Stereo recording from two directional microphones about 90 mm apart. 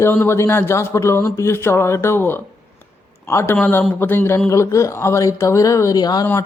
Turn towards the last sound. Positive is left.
turn(degrees=45)  # may be behind; listen again after turning